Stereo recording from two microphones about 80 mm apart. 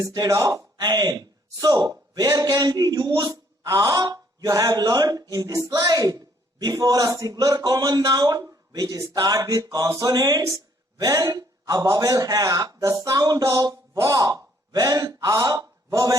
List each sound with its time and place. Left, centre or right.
0.0 s a man's voice: right